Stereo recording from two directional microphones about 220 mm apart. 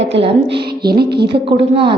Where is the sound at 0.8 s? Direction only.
45° right (ahead or behind).